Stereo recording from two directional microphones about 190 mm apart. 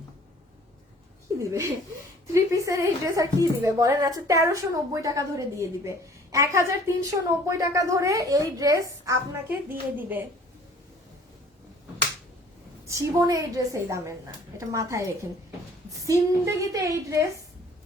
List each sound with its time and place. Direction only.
2.2 s a woman's voice: 15° right (ahead or behind)
12.9 s a woman's voice: 15° right (ahead or behind)